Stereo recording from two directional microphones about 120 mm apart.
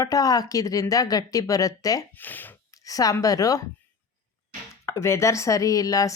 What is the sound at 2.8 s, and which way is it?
Speech, 30° left (ahead or behind).